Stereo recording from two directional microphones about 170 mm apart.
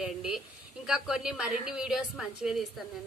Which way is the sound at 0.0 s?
5° right (ahead or behind).